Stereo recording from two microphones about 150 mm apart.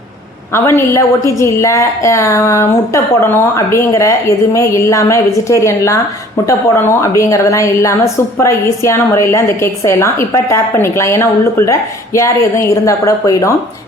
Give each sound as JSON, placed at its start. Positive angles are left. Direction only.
{"t": 0.5, "sound": "a woman's voice", "side_deg": 20}